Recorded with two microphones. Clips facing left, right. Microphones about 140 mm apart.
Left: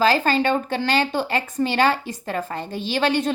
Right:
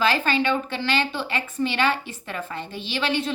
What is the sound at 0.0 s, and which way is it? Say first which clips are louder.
Speech: left 3 dB; 40° left (ahead or behind).